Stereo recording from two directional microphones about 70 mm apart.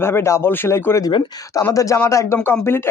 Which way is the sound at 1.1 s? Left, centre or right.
Left.